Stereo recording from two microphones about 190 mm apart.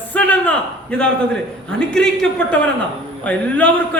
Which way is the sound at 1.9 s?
5° left (ahead or behind).